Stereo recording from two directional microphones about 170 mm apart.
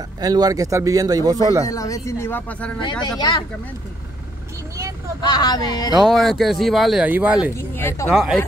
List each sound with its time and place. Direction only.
0.2 s a man's voice: 20° right (ahead or behind)
1.7 s speech: 20° left (ahead or behind)
3.0 s speech: 25° left (ahead or behind)
5.2 s speech: 25° left (ahead or behind)
6.0 s speech: centre (ahead or behind)
7.5 s speech: 15° left (ahead or behind)
8.1 s speech: centre (ahead or behind)